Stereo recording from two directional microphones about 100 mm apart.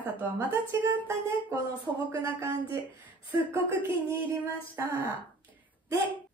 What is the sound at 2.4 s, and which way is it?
A woman's voice, 30° right (ahead or behind).